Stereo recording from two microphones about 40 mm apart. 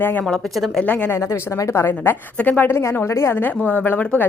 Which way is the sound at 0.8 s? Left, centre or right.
Left.